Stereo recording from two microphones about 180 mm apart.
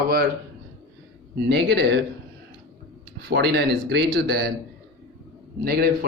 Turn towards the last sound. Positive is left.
turn(degrees=-60)  # may be behind; listen again after turning